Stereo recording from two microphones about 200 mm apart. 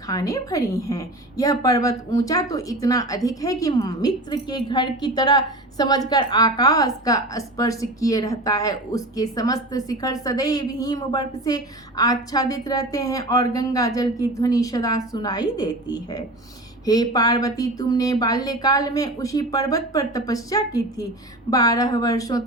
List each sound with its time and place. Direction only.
0.1 s a woman's voice: 20° left (ahead or behind)